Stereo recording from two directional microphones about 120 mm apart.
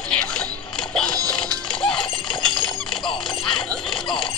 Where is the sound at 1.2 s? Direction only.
30° right (ahead or behind).